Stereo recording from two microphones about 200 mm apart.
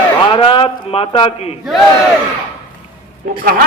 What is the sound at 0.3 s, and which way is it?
A man's voice, 25° left (ahead or behind).